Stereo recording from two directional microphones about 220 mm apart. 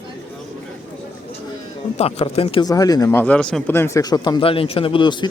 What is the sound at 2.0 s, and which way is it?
Speech, 25° left (ahead or behind).